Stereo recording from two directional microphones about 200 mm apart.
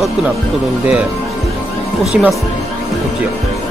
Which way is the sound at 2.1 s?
5° right (ahead or behind).